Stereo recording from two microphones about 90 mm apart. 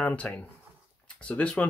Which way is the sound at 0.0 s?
15° left (ahead or behind).